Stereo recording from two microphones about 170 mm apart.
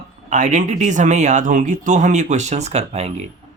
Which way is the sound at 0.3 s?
45° right (ahead or behind).